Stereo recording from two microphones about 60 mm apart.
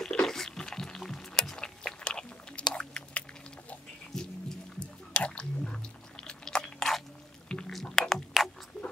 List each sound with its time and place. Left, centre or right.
0.0 s music: centre
4.7 s squish: centre
6.2 s chewing: centre
7.7 s a sound: centre